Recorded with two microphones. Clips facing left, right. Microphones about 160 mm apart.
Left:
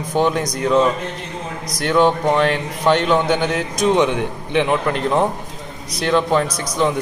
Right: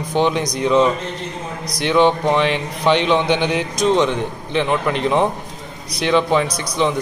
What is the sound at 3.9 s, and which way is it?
A man's voice, 10° left (ahead or behind).